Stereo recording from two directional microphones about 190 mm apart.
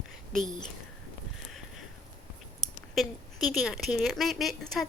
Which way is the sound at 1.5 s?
Centre (ahead or behind).